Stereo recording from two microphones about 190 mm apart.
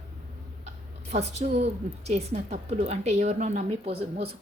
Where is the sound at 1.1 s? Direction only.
35° right (ahead or behind).